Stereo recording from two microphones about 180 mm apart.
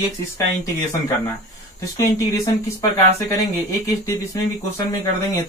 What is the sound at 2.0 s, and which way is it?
Speech, 15° left (ahead or behind).